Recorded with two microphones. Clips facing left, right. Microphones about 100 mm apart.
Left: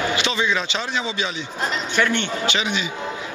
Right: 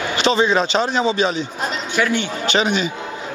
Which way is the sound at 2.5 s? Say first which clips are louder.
Right 9 dB; 40° right (ahead or behind).